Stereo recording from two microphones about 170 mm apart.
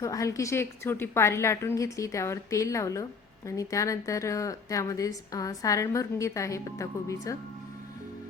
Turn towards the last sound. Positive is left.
turn(degrees=20)  # may be behind; listen again after turning